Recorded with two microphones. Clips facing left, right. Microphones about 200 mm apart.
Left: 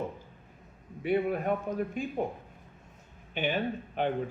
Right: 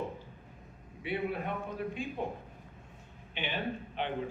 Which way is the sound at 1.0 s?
45° left (ahead or behind).